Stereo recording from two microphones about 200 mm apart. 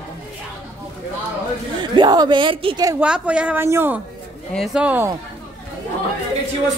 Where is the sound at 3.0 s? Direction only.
5° right (ahead or behind).